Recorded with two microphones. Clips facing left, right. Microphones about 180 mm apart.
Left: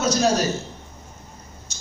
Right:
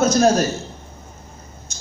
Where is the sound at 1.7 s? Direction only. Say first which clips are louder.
Right 3 dB; 50° right (ahead or behind).